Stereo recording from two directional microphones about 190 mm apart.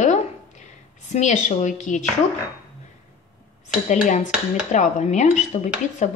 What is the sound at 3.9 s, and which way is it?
A woman's voice, 40° left (ahead or behind).